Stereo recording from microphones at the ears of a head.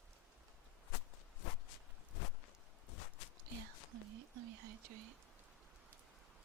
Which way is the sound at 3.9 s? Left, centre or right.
Right.